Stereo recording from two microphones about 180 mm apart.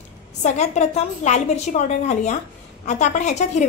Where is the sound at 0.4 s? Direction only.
40° left (ahead or behind).